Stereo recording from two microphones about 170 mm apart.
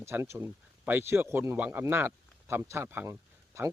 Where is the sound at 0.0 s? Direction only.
15° right (ahead or behind).